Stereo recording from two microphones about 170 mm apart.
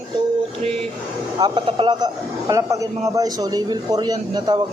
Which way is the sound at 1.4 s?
30° right (ahead or behind).